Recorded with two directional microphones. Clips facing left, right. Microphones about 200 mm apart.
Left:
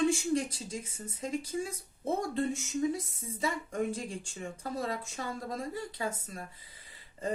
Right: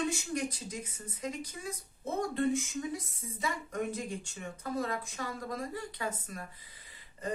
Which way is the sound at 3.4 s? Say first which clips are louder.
Left 3 dB; 30° left (ahead or behind).